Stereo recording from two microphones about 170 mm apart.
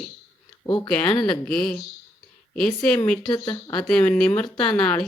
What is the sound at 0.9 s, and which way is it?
Speech, 5° left (ahead or behind).